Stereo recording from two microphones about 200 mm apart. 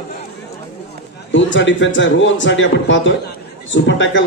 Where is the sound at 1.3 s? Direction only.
65° left (ahead or behind).